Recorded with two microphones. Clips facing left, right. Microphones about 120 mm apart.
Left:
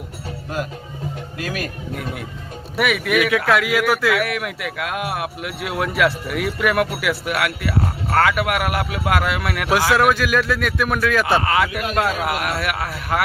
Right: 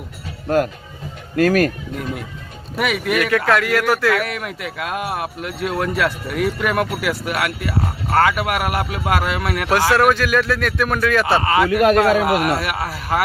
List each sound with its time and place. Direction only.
0.4 s speech: 50° right (ahead or behind)
2.7 s speech: centre (ahead or behind)